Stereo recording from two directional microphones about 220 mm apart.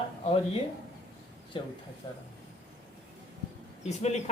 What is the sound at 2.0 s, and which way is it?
Speech, 20° left (ahead or behind).